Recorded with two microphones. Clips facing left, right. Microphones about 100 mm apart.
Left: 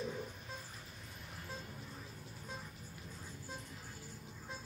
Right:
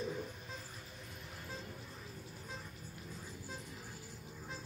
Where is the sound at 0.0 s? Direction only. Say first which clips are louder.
Right 1 dB; centre (ahead or behind).